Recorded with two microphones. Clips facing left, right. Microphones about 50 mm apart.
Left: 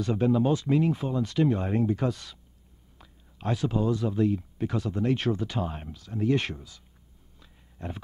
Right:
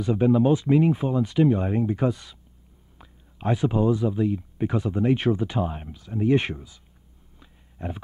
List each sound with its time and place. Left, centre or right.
0.0 s speech: centre
4.6 s speech: centre
7.3 s a sound: centre